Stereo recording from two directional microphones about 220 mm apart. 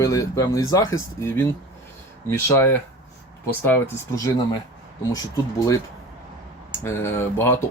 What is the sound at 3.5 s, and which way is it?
Speech, 10° left (ahead or behind).